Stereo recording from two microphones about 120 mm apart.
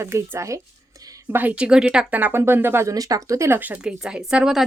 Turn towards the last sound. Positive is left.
turn(degrees=-5)  # may be behind; listen again after turning